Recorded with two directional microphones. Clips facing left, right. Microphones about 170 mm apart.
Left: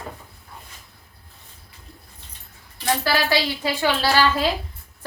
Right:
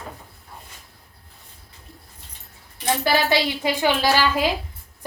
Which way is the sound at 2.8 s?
20° right (ahead or behind).